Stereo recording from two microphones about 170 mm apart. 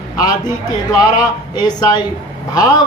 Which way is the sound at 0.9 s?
25° left (ahead or behind).